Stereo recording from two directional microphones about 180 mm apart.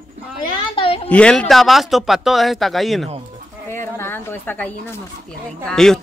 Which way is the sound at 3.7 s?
15° left (ahead or behind).